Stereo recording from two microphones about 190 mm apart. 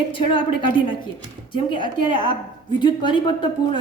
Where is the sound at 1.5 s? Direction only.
25° left (ahead or behind).